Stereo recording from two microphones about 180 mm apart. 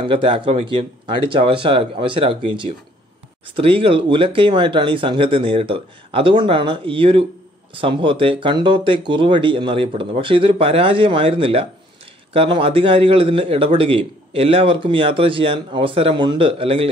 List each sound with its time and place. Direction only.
0.0 s a man's voice: 30° right (ahead or behind)